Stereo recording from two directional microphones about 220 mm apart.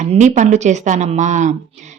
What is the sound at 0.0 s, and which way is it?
A woman's voice, 35° right (ahead or behind).